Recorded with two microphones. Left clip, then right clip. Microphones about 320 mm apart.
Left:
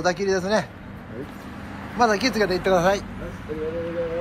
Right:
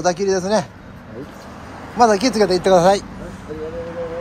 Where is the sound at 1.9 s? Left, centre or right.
Centre.